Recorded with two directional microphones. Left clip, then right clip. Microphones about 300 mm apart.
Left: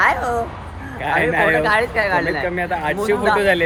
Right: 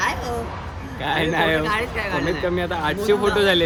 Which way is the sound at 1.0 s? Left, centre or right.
Centre.